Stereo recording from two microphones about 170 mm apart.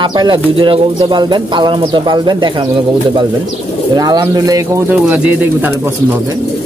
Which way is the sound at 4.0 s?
25° right (ahead or behind).